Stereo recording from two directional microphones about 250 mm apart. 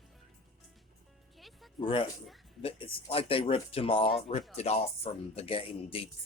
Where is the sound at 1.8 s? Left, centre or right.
Left.